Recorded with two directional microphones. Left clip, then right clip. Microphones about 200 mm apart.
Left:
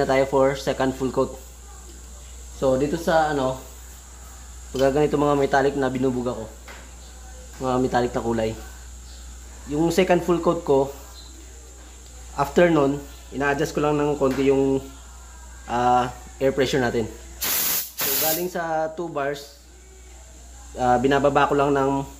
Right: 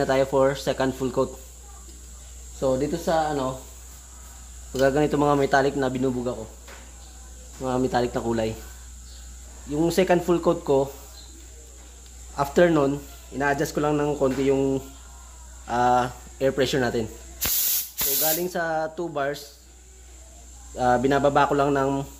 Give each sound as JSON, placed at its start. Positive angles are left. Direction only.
{"t": 0.0, "sound": "speech", "side_deg": -15}
{"t": 2.6, "sound": "speech", "side_deg": -10}
{"t": 4.7, "sound": "speech", "side_deg": -25}
{"t": 7.6, "sound": "speech", "side_deg": -15}
{"t": 9.7, "sound": "speech", "side_deg": -15}
{"t": 12.4, "sound": "speech", "side_deg": -15}
{"t": 18.4, "sound": "speech", "side_deg": -20}
{"t": 20.7, "sound": "speech", "side_deg": -20}